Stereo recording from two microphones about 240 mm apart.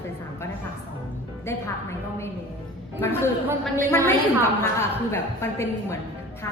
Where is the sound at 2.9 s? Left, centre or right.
Centre.